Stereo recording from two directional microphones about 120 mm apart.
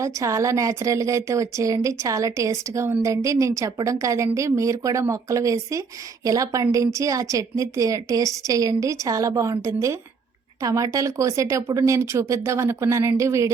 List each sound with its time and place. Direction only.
0.0 s a woman's voice: 25° right (ahead or behind)